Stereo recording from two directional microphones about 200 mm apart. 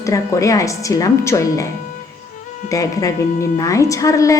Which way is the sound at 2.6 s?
15° left (ahead or behind).